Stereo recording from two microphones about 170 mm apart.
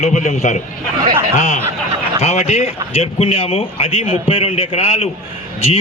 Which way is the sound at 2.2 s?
40° left (ahead or behind).